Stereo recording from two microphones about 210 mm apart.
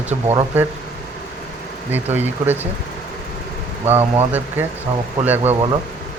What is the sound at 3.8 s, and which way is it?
Speech, 30° right (ahead or behind).